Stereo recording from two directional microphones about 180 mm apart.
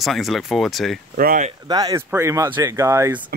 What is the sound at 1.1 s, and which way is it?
Speech, 50° right (ahead or behind).